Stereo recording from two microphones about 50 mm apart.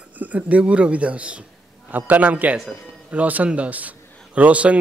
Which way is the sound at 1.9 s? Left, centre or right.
Right.